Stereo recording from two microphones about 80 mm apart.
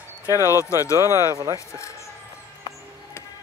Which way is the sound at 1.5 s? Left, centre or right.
Left.